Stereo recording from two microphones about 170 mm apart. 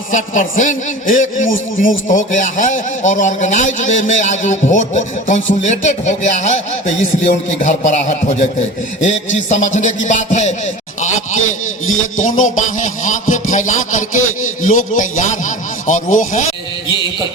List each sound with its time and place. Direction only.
0.1 s a man's voice: 50° left (ahead or behind)
11.9 s a man's voice: 50° left (ahead or behind)